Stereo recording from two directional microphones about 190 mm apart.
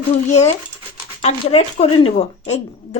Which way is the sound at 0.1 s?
35° left (ahead or behind).